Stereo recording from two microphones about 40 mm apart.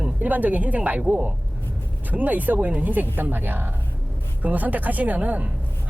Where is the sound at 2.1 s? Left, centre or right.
Right.